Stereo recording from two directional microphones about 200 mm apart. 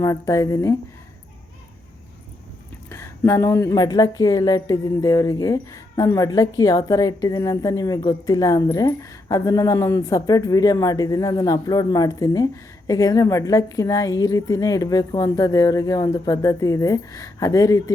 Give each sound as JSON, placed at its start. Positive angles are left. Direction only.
{"t": 0.0, "sound": "a woman's voice", "side_deg": 15}
{"t": 2.9, "sound": "a woman's voice", "side_deg": 15}